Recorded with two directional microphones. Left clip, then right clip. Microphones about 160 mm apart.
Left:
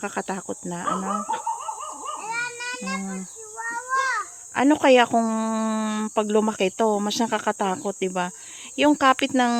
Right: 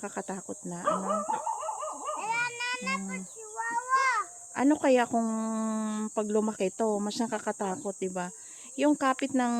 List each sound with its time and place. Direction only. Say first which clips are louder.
0.0 s cricket: left 8 dB; 45° left (ahead or behind)
2.1 s a sound: left 2 dB; 15° left (ahead or behind)
4.5 s speech: left 8 dB; 35° left (ahead or behind)